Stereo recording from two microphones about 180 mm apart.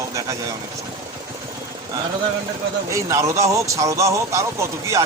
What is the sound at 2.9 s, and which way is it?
Speech, 15° right (ahead or behind).